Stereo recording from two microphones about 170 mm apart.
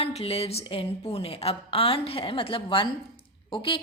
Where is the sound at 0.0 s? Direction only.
35° left (ahead or behind).